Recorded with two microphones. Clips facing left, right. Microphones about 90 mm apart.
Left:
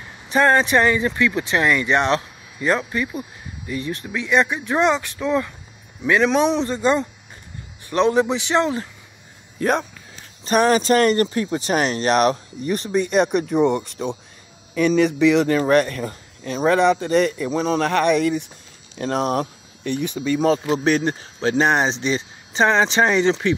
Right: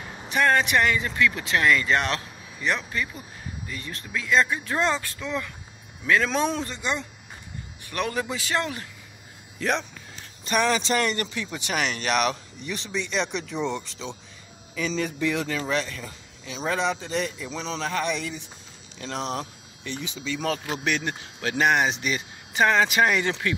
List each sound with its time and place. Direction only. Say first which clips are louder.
0.3 s speech: left 5 dB; 30° left (ahead or behind)
3.0 s speech: left 5 dB; 20° left (ahead or behind)
5.2 s speech: left 9 dB; 30° left (ahead or behind)
6.0 s speech: left 6 dB; 20° left (ahead or behind)
6.7 s speech: left 10 dB; 35° left (ahead or behind)
7.9 s speech: left 10 dB; 25° left (ahead or behind)
9.6 s speech: left 6 dB; 50° left (ahead or behind)
14.8 s a man's voice: left 11 dB; 65° left (ahead or behind); by 15.4 s 80° left
15.4 s speech: left 11 dB; 55° left (ahead or behind)
20.4 s speech: left 9 dB; 30° left (ahead or behind)